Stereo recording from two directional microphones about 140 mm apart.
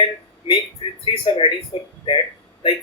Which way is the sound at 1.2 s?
40° left (ahead or behind).